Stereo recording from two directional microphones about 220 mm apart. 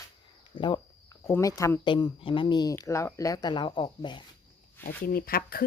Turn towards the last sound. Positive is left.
turn(degrees=40)  # may be behind; listen again after turning